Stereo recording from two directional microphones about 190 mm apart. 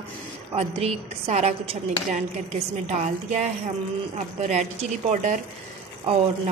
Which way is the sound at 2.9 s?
35° right (ahead or behind).